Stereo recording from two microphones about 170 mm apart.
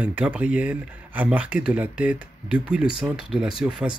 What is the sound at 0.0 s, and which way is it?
Speech, 10° right (ahead or behind).